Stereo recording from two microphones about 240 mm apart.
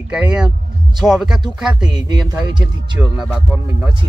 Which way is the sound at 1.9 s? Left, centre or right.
Centre.